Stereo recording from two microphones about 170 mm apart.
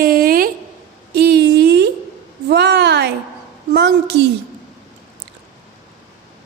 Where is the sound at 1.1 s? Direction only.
70° right (ahead or behind).